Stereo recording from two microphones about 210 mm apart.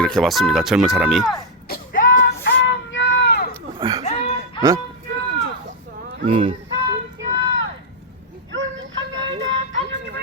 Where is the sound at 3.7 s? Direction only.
20° right (ahead or behind).